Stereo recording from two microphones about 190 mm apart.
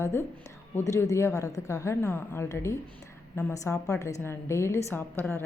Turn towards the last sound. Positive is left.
turn(degrees=10)  # may be behind; listen again after turning